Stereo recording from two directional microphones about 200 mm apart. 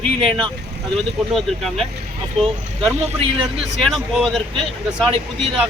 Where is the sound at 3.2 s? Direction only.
30° right (ahead or behind).